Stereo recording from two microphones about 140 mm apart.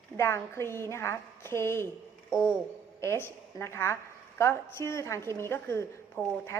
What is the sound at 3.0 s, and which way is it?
A woman's voice, 20° left (ahead or behind).